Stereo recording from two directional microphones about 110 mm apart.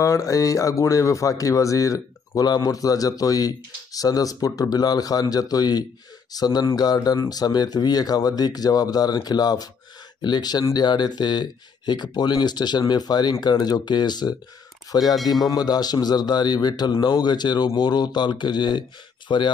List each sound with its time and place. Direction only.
0.0 s speech: 30° left (ahead or behind); by 19.5 s 45° left (ahead or behind)